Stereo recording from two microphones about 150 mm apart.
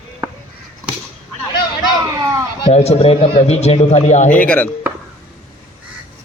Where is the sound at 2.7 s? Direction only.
45° left (ahead or behind).